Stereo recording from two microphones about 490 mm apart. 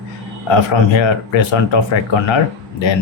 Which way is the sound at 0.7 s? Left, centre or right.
Left.